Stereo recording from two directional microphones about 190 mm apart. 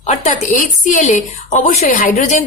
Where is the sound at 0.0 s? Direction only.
40° left (ahead or behind).